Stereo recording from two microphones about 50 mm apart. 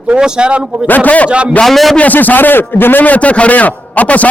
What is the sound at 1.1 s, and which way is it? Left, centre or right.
Speech, left.